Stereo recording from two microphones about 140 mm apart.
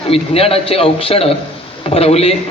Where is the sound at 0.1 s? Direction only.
45° left (ahead or behind).